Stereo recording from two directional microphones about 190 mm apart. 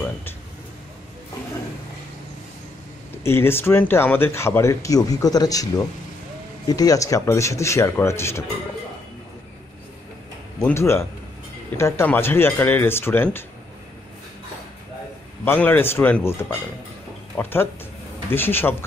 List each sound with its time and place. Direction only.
3.3 s speech: 10° left (ahead or behind)
6.7 s speech: 20° left (ahead or behind)
10.6 s speech: 15° left (ahead or behind)
15.4 s speech: 10° left (ahead or behind)